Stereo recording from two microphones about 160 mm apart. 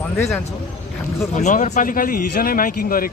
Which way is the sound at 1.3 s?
50° left (ahead or behind).